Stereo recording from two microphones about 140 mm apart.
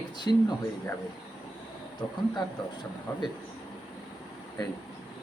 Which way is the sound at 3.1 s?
20° left (ahead or behind).